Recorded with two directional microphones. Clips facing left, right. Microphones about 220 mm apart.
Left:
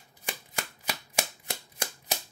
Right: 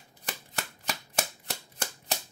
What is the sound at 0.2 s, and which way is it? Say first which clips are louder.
Shuffling cards: left 1 dB; 10° left (ahead or behind).